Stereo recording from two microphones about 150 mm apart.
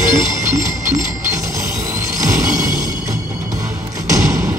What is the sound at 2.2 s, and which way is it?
Music, 20° right (ahead or behind).